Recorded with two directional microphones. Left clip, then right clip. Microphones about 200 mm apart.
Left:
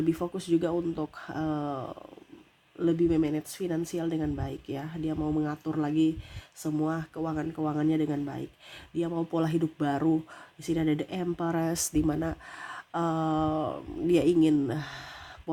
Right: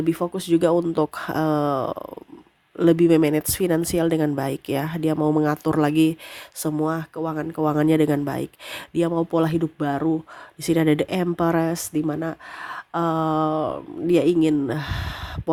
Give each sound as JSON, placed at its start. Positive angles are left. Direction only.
{"t": 0.0, "sound": "speech", "side_deg": -25}
{"t": 10.6, "sound": "speech", "side_deg": -30}